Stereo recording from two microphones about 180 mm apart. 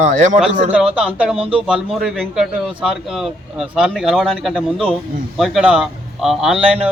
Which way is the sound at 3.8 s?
Centre (ahead or behind).